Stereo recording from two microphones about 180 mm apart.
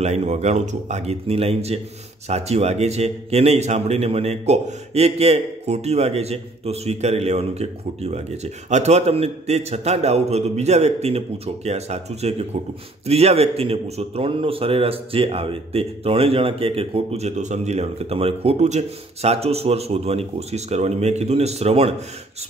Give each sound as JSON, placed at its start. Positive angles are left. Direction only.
{"t": 0.0, "sound": "a man's voice", "side_deg": -35}